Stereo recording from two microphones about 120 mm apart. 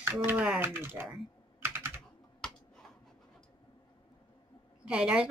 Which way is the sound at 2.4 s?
5° left (ahead or behind).